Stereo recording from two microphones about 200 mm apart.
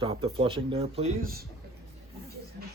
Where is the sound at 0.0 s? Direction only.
30° right (ahead or behind).